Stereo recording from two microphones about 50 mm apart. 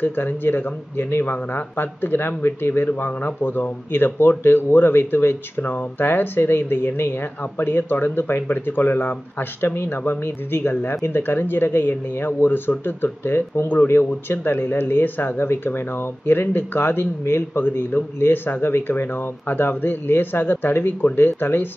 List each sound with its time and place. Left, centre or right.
0.0 s speech: left
3.1 s speech: left